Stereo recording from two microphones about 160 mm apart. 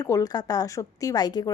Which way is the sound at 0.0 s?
25° left (ahead or behind).